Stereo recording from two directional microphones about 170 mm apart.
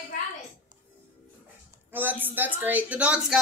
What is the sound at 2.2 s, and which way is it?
Speech, 10° right (ahead or behind).